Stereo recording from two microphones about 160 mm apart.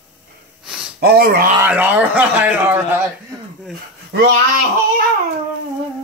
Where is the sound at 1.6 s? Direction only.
10° right (ahead or behind).